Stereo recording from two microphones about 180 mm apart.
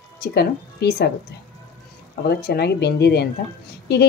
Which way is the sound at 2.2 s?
65° left (ahead or behind).